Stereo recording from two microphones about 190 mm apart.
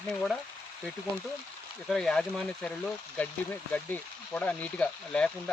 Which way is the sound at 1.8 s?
5° left (ahead or behind).